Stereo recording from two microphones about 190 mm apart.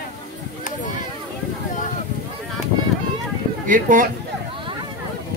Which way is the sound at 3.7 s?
45° right (ahead or behind).